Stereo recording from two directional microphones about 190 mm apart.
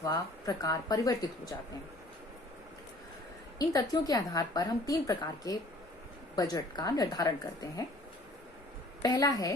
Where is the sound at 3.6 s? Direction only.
20° left (ahead or behind).